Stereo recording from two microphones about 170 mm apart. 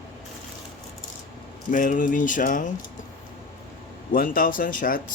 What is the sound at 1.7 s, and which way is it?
Speech, 50° left (ahead or behind).